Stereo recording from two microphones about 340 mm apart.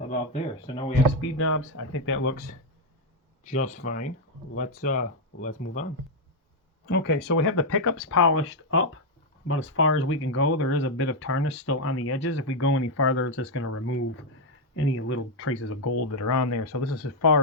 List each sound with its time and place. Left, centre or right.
0.7 s speech: centre
1.2 s speech: left
2.3 s speech: left
3.8 s speech: left
6.9 s speech: left